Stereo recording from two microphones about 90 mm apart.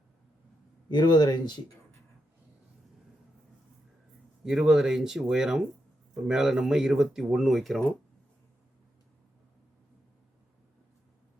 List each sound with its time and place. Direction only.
0.9 s speech: 55° left (ahead or behind)
4.4 s speech: 5° right (ahead or behind)